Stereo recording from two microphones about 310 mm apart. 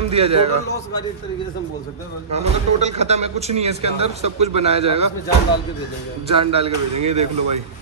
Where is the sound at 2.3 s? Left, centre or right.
Right.